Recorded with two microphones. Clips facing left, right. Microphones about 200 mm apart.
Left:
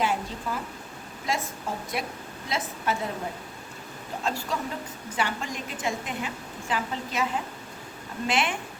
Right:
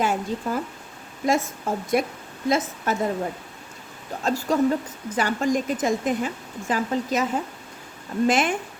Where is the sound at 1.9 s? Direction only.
50° right (ahead or behind).